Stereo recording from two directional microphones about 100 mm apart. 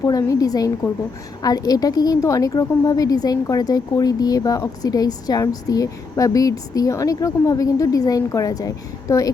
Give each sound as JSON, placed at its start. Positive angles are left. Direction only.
{"t": 0.0, "sound": "speech", "side_deg": 35}